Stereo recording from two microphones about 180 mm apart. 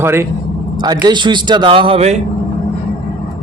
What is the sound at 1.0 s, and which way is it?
A man's voice, 25° right (ahead or behind).